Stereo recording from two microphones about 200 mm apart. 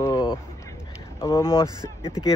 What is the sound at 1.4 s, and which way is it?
Speech, 15° left (ahead or behind).